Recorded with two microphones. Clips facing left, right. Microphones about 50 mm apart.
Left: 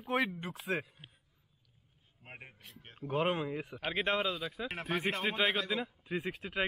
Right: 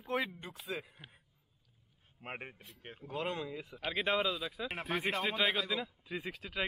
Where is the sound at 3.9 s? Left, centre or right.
Centre.